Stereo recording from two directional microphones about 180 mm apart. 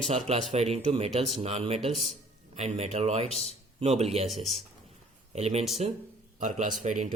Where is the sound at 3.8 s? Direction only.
35° right (ahead or behind).